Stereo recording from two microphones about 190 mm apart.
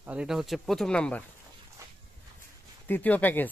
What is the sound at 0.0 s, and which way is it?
A man's voice, 5° right (ahead or behind).